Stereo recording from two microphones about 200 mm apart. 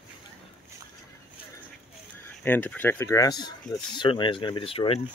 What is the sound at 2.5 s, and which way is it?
Speech, 10° left (ahead or behind).